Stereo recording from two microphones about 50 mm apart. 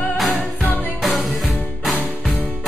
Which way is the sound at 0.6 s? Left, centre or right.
Left.